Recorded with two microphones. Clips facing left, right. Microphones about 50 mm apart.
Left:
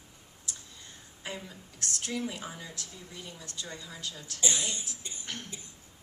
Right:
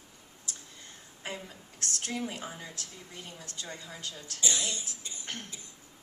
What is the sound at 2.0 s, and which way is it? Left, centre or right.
A woman's voice, right.